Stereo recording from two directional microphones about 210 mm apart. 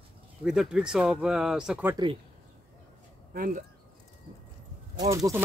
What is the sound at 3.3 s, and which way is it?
Speech, 40° right (ahead or behind).